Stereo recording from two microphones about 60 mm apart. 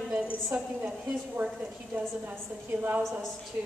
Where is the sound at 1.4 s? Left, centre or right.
Right.